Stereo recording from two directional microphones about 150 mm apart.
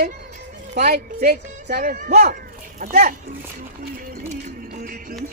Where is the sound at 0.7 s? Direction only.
90° right; by 2.2 s 70° right (ahead or behind).